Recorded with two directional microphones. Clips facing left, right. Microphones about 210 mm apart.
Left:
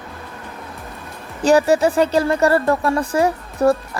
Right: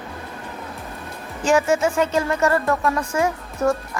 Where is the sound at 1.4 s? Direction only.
35° left (ahead or behind).